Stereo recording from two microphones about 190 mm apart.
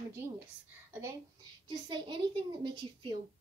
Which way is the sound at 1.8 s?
25° right (ahead or behind).